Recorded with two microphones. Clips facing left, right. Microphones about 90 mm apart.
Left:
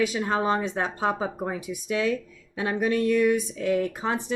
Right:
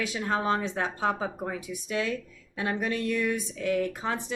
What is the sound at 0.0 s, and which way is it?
Speech, 20° left (ahead or behind).